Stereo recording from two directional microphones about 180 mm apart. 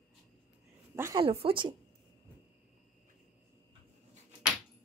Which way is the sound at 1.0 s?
20° right (ahead or behind).